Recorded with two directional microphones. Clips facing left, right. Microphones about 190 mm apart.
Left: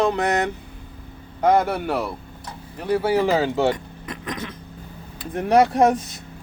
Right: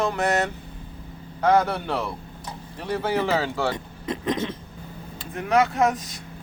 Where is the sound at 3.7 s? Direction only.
25° right (ahead or behind).